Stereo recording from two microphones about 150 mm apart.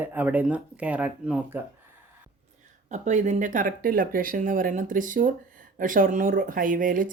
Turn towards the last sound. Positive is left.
turn(degrees=-65)  # may be behind; listen again after turning